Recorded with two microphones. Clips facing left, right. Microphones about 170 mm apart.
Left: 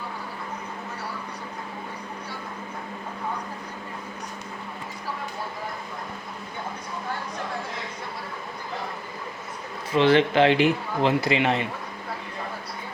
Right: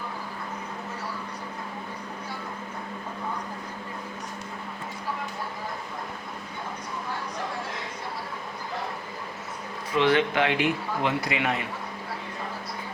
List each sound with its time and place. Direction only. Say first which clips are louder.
9.9 s speech: left 4 dB; 30° left (ahead or behind)